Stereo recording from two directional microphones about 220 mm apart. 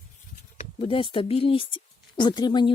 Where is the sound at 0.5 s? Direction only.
30° left (ahead or behind).